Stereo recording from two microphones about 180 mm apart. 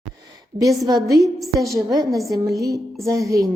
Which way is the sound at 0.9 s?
20° right (ahead or behind).